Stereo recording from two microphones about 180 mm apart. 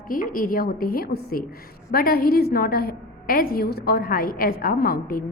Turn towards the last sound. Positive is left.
turn(degrees=55)  # may be behind; listen again after turning